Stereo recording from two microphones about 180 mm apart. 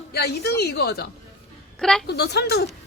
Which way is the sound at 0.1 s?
65° left (ahead or behind).